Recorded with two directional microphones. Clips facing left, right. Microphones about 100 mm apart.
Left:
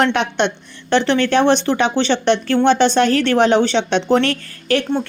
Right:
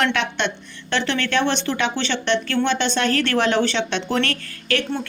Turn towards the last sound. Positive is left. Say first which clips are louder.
# left 5 dB
turn(degrees=35)  # may be behind; listen again after turning